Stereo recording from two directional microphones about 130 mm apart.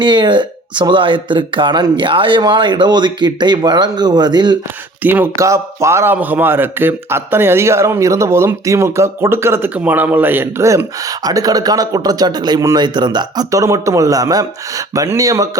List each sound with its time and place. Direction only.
0.0 s speech: 35° right (ahead or behind)
5.0 s a man's voice: 15° right (ahead or behind)